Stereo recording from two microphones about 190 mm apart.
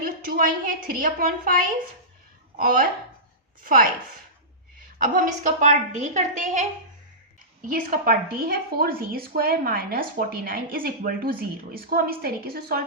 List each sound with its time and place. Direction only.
0.0 s a woman's voice: 50° right (ahead or behind)
2.6 s a woman's voice: 45° right (ahead or behind)
4.9 s a woman's voice: 45° right (ahead or behind)
7.7 s a woman's voice: 45° right (ahead or behind)